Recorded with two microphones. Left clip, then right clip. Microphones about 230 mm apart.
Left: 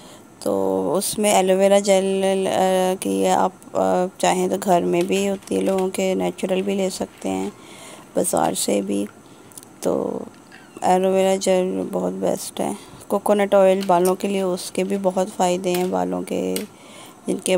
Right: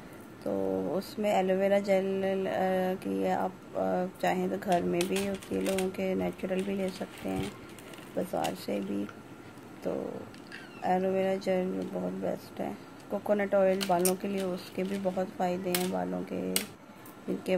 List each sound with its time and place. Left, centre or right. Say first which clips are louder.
0.4 s speech: left 11 dB; left
4.9 s speech: left 10 dB; centre
5.9 s speech: left 10 dB; left
8.2 s speech: left 12 dB; left
10.8 s speech: left 11 dB; left